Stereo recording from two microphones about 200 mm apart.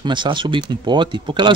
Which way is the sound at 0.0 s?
25° right (ahead or behind).